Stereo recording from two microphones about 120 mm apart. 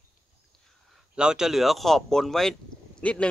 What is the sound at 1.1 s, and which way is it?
A man's voice, 5° right (ahead or behind).